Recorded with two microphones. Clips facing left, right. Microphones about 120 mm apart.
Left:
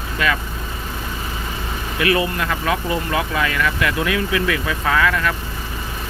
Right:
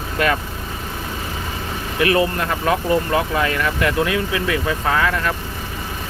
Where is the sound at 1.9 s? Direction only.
35° right (ahead or behind).